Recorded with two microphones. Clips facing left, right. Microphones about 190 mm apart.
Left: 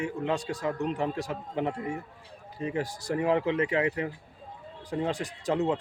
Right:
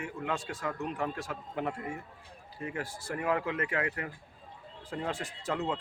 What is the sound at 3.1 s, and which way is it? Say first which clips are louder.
A man's voice: left 6 dB; 25° left (ahead or behind).